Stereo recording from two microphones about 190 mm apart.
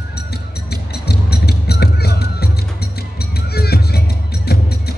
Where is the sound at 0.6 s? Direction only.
60° left (ahead or behind).